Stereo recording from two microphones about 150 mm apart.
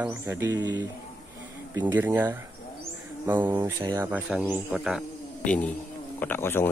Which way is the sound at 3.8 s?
20° right (ahead or behind).